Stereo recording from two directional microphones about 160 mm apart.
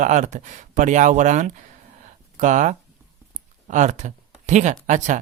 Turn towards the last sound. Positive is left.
turn(degrees=-50)  # may be behind; listen again after turning